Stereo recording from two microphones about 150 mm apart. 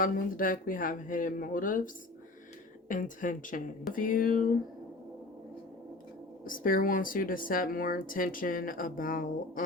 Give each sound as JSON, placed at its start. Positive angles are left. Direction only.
{"t": 0.0, "sound": "speech", "side_deg": 65}
{"t": 2.9, "sound": "speech", "side_deg": 60}
{"t": 6.4, "sound": "speech", "side_deg": 70}